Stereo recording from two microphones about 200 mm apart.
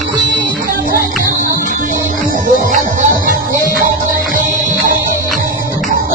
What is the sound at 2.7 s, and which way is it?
Music, 40° right (ahead or behind).